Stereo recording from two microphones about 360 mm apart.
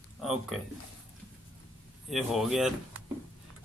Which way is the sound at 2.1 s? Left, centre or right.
Centre.